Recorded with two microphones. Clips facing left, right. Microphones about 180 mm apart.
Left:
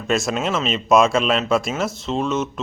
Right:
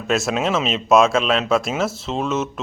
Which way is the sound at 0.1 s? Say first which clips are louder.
Right 1 dB; centre (ahead or behind).